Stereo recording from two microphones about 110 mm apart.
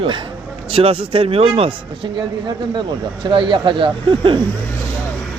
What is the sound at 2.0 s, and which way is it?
Speech, 45° right (ahead or behind).